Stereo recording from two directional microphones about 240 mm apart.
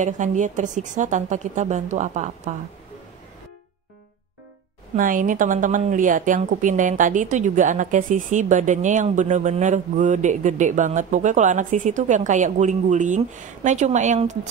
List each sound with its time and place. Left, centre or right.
0.0 s a woman's voice: right
4.9 s a woman's voice: right